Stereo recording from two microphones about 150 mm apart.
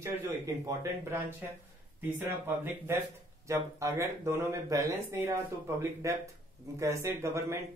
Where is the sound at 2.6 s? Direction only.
15° right (ahead or behind).